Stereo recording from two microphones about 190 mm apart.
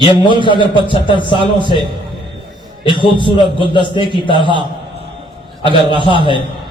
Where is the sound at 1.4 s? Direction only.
25° right (ahead or behind).